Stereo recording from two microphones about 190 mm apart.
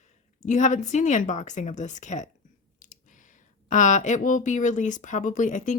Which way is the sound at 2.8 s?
40° left (ahead or behind).